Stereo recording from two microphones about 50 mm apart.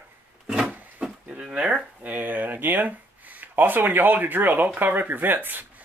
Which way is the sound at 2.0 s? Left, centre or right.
Right.